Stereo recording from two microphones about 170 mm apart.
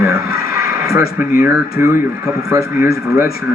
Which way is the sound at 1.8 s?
15° right (ahead or behind).